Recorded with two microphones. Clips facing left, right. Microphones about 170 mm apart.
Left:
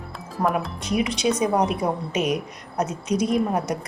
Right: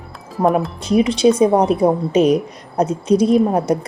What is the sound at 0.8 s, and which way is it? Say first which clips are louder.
A woman's voice: right 10 dB; 30° right (ahead or behind).